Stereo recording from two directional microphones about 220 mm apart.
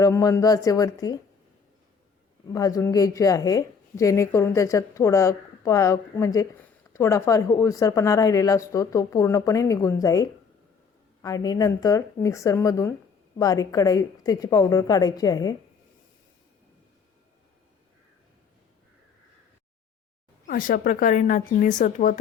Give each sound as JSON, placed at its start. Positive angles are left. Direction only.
{"t": 0.0, "sound": "a woman's voice", "side_deg": 15}
{"t": 2.5, "sound": "a woman's voice", "side_deg": 15}
{"t": 20.5, "sound": "speech", "side_deg": 40}